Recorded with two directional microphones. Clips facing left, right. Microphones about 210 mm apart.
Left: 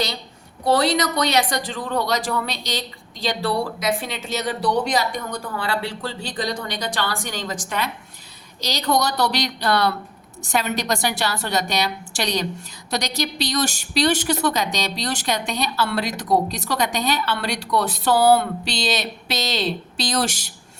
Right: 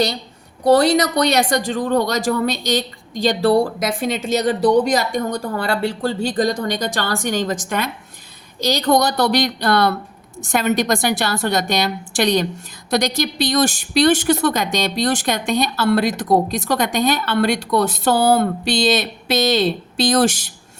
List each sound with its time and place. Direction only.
0.6 s a woman's voice: 45° right (ahead or behind)